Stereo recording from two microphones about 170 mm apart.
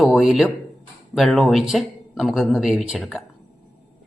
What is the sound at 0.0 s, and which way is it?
Speech, 5° right (ahead or behind).